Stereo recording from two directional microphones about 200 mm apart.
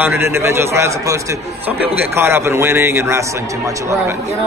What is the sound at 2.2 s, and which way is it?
A man's voice, 10° right (ahead or behind).